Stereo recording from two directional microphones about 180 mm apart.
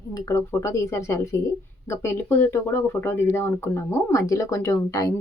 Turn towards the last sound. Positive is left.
turn(degrees=15)  # may be behind; listen again after turning